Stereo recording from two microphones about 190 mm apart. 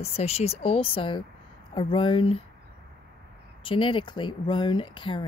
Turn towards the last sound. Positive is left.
turn(degrees=25)  # may be behind; listen again after turning